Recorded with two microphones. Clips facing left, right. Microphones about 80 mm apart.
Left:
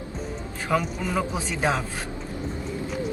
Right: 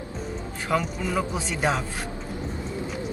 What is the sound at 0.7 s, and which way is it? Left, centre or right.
Speech, centre.